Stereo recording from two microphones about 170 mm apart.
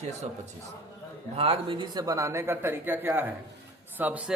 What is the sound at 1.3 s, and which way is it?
A man's voice, 35° right (ahead or behind).